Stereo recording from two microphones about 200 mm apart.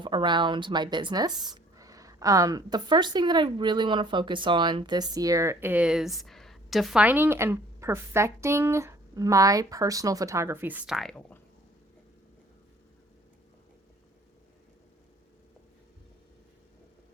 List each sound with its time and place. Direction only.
0.0 s a woman's voice: 25° right (ahead or behind); by 11.3 s 5° left (ahead or behind)